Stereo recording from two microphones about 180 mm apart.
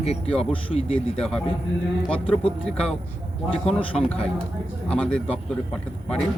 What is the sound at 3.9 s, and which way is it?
Speech, 5° left (ahead or behind).